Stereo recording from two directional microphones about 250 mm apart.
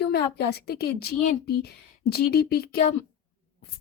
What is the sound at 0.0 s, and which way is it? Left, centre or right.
A woman's voice, left.